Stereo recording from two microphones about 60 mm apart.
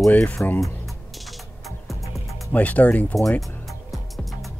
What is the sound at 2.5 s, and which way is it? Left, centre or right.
Speech, left.